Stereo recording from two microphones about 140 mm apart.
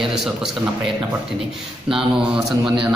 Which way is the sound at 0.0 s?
Centre (ahead or behind).